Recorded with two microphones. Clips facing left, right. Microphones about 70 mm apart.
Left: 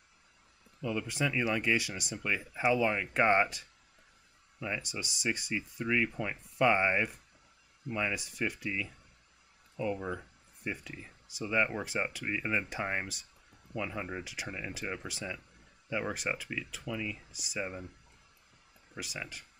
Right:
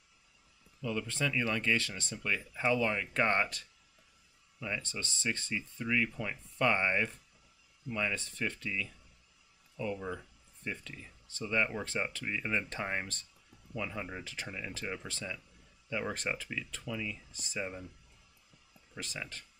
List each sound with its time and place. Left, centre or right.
0.8 s speech: centre
18.9 s speech: centre